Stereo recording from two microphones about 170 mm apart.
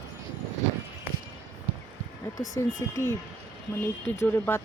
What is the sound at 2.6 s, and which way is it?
Speech, 15° left (ahead or behind).